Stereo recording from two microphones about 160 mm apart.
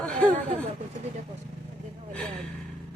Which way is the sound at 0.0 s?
10° left (ahead or behind).